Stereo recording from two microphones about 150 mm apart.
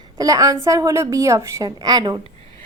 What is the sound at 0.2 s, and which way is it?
A woman's voice, 25° right (ahead or behind).